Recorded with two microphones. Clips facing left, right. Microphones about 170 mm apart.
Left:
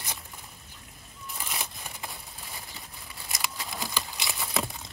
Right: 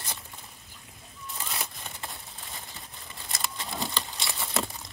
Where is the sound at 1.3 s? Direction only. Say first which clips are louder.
Even; 10° left (ahead or behind).